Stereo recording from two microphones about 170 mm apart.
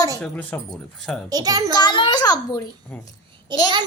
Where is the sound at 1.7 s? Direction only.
25° left (ahead or behind).